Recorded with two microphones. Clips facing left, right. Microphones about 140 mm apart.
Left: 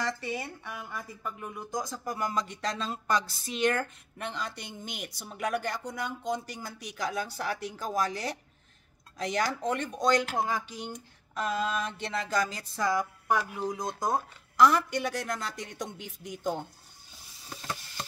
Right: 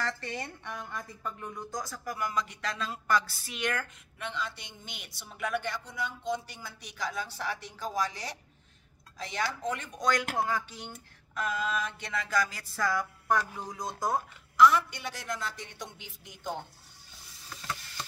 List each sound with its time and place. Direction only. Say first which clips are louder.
0.0 s speech: left 2 dB; 10° left (ahead or behind); by 7.9 s 45° left (ahead or behind)
9.3 s speech: left 3 dB; 40° left (ahead or behind)
10.0 s speech: left 2 dB; 20° left (ahead or behind)
11.3 s speech: left 2 dB; 30° left (ahead or behind)
14.6 s speech: even; 40° left (ahead or behind)
15.0 s speech: left 4 dB; 50° left (ahead or behind)
17.5 s stir: left 1 dB; 25° left (ahead or behind)